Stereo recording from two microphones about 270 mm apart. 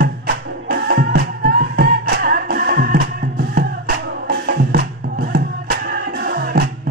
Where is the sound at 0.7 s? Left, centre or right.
Right.